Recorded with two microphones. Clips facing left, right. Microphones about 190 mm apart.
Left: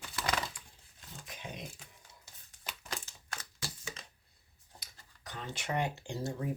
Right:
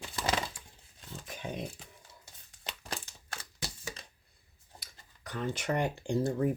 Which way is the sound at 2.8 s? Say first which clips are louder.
Right 2 dB; 30° right (ahead or behind).